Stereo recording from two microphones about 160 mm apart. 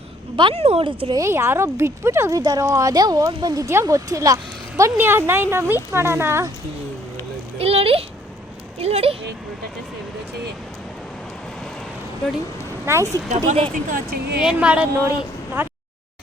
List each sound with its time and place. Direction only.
0.3 s speech: 35° right (ahead or behind)
1.1 s a woman's voice: 20° right (ahead or behind)
7.6 s speech: 35° right (ahead or behind)
12.8 s speech: 15° right (ahead or behind)
13.1 s speech: 45° right (ahead or behind)
13.9 s speech: 75° right (ahead or behind)
14.4 s speech: 5° right (ahead or behind)
15.6 s a sound: 15° right (ahead or behind)